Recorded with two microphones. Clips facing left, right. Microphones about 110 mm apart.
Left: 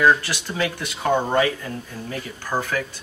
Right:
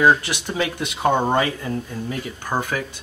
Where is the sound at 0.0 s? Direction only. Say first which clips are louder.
Right 1 dB; 20° right (ahead or behind).